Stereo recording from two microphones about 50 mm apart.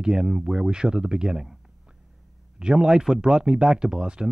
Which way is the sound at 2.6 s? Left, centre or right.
Centre.